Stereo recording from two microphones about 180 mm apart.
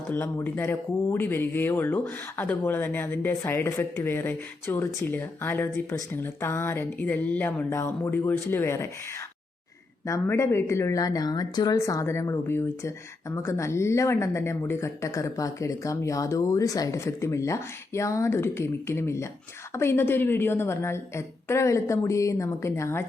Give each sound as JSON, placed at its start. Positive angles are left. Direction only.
{"t": 0.1, "sound": "a woman's voice", "side_deg": 10}
{"t": 10.1, "sound": "a woman's voice", "side_deg": 15}